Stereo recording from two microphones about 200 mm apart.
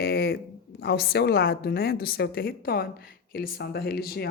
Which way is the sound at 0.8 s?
55° left (ahead or behind).